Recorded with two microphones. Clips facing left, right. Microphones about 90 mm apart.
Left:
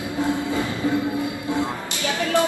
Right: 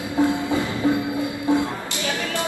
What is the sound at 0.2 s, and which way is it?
Train, 20° right (ahead or behind).